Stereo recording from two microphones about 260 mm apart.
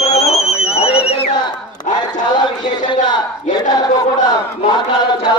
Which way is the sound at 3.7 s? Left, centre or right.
Centre.